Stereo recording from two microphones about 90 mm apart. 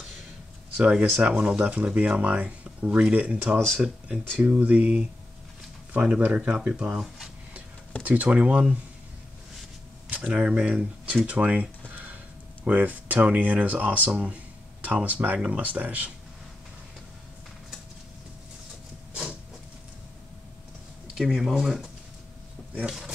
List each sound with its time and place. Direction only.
0.7 s speech: 10° right (ahead or behind)
10.0 s speech: 15° right (ahead or behind)
11.9 s tick: 15° right (ahead or behind)
12.6 s speech: 15° right (ahead or behind)
21.1 s speech: 5° right (ahead or behind)